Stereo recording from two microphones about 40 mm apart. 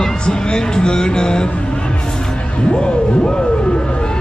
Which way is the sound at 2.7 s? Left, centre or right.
Left.